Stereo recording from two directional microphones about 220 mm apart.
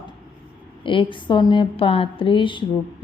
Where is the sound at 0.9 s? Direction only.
20° left (ahead or behind).